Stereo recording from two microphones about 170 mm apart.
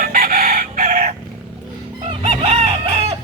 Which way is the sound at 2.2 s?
40° right (ahead or behind).